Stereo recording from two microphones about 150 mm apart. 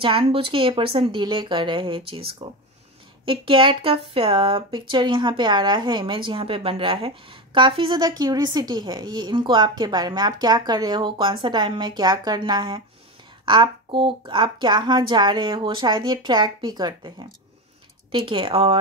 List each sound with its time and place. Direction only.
0.0 s speech: 35° right (ahead or behind)